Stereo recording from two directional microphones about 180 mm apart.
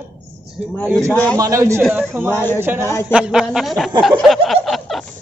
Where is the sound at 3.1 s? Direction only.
5° right (ahead or behind).